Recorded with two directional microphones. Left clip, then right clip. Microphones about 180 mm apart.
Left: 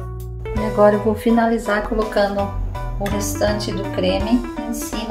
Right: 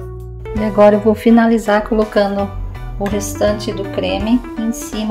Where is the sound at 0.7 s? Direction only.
45° right (ahead or behind).